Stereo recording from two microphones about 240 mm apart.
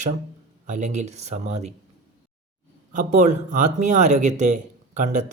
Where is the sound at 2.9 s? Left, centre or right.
Right.